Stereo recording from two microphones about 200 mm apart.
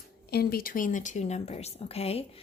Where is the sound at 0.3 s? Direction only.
50° left (ahead or behind).